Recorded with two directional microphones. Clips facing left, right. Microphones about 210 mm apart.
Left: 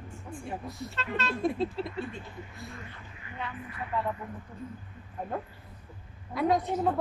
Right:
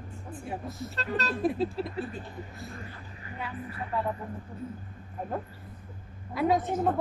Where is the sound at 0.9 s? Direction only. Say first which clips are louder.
Right 1 dB; 40° right (ahead or behind).